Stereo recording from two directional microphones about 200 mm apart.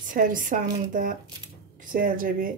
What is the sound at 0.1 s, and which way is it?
Speech, 40° right (ahead or behind).